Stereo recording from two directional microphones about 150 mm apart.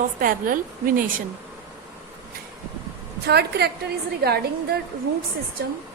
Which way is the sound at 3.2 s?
90° right.